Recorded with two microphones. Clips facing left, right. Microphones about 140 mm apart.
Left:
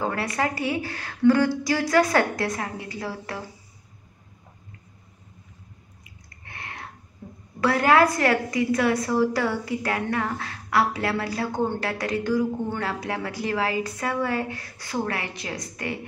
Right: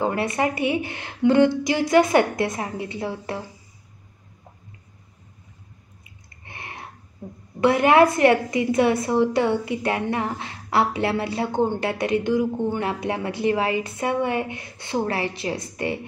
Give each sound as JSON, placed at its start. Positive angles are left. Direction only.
{"t": 0.0, "sound": "a woman's voice", "side_deg": -25}
{"t": 6.4, "sound": "a sound", "side_deg": -20}
{"t": 7.6, "sound": "a woman's voice", "side_deg": -20}